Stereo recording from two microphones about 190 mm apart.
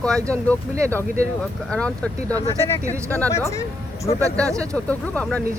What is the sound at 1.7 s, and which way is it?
Speech, 5° left (ahead or behind).